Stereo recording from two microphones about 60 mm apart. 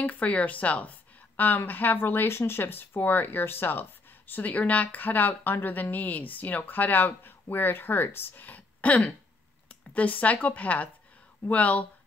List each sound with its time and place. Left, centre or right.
0.0 s speech: left